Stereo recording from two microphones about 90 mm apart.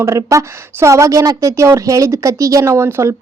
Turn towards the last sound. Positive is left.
turn(degrees=-30)  # may be behind; listen again after turning